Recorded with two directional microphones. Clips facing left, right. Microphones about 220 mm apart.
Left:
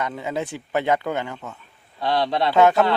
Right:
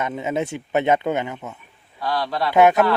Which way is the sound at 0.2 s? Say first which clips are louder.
Right 3 dB; 20° right (ahead or behind).